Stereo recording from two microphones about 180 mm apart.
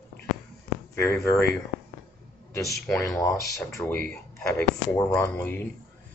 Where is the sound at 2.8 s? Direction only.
15° left (ahead or behind).